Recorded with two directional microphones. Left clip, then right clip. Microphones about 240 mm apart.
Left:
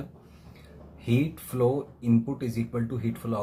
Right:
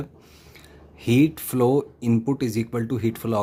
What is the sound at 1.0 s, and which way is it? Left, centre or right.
Speech, right.